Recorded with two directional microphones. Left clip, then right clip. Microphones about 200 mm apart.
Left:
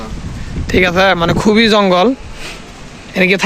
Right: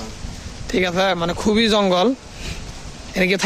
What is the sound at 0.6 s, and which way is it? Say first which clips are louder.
Speech: left 8 dB; centre (ahead or behind).